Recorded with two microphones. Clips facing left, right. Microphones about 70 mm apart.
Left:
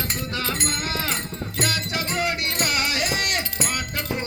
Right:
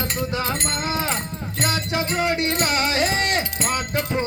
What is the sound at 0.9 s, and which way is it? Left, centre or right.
Music, right.